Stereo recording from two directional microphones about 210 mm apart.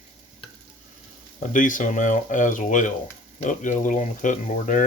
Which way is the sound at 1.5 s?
40° left (ahead or behind).